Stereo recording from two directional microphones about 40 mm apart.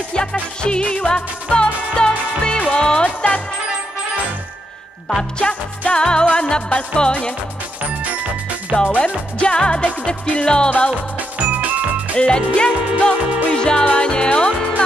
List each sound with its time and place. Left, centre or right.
0.1 s music: left
5.4 s music: left
8.7 s music: left
12.2 s music: left